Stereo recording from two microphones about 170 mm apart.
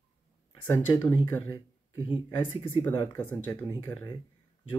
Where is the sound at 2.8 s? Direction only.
15° left (ahead or behind).